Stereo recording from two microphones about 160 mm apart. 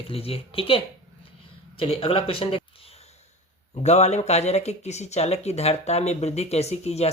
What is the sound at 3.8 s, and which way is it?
Speech, 45° left (ahead or behind).